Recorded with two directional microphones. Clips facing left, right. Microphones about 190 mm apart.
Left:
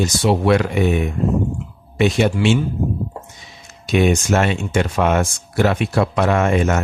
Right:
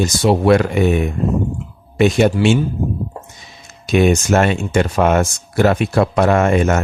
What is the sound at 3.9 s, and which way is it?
Speech, 45° right (ahead or behind).